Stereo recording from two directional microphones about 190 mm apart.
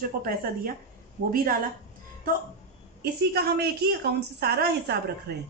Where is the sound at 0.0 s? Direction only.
50° right (ahead or behind).